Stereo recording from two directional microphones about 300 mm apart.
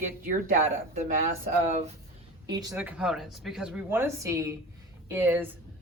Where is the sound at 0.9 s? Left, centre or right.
Right.